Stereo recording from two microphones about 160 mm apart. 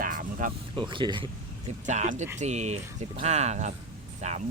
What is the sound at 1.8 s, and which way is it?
Speech, 50° right (ahead or behind).